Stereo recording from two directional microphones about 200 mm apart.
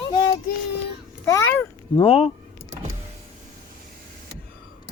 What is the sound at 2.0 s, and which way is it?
Child singing, 30° left (ahead or behind).